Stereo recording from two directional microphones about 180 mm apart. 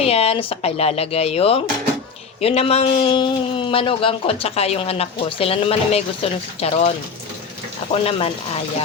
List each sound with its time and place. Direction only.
0.0 s speech: 35° left (ahead or behind)
8.0 s speech: 35° left (ahead or behind)